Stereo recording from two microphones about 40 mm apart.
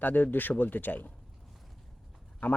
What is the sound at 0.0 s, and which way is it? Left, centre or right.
Speech, left.